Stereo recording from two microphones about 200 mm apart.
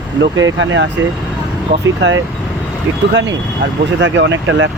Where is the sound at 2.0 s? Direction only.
65° right (ahead or behind).